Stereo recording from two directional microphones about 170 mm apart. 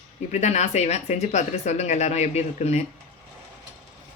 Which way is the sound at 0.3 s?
40° left (ahead or behind).